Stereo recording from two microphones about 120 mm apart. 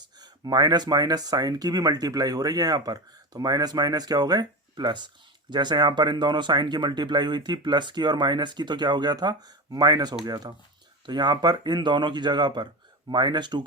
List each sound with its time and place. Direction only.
0.0 s speech: 35° right (ahead or behind)